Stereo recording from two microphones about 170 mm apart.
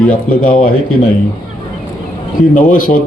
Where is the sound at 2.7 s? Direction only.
55° left (ahead or behind).